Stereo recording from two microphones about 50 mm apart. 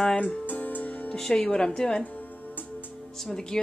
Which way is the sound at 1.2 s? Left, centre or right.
Centre.